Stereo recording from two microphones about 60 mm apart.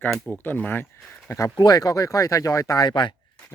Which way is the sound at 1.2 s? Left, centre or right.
Left.